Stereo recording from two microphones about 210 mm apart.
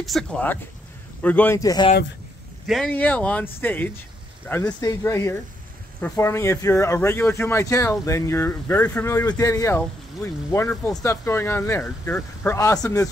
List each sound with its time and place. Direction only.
0.0 s speech: centre (ahead or behind); by 1.9 s 15° left (ahead or behind)
2.6 s speech: centre (ahead or behind)